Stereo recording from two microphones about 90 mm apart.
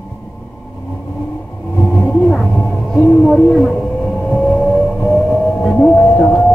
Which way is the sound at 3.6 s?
10° left (ahead or behind).